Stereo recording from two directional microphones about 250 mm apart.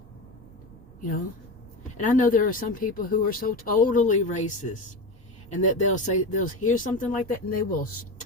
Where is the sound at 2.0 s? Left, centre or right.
Left.